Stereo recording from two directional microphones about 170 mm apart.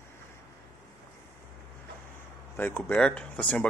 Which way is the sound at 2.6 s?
10° left (ahead or behind).